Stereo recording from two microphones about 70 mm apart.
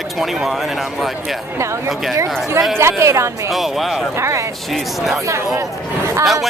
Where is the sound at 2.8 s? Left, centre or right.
Right.